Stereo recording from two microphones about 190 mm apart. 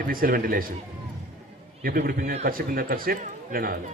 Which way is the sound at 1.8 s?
50° right (ahead or behind).